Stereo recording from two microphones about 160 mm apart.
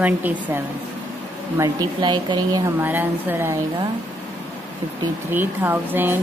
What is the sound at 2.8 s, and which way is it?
Speech, 10° right (ahead or behind).